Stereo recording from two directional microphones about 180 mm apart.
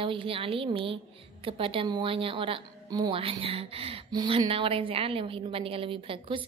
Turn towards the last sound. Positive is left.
turn(degrees=-30)  # may be behind; listen again after turning